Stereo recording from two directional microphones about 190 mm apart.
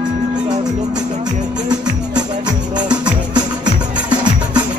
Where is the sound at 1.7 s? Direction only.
20° right (ahead or behind).